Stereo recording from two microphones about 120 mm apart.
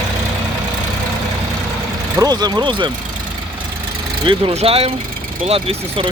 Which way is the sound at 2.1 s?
35° right (ahead or behind).